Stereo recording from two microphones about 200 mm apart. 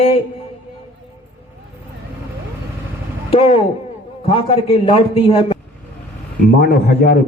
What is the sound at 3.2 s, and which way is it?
A man's voice, 30° left (ahead or behind).